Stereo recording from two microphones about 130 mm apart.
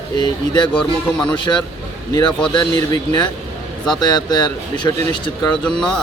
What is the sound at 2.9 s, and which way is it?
Speech, 35° left (ahead or behind).